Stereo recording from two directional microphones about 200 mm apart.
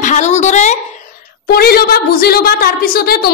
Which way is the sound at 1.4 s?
50° left (ahead or behind).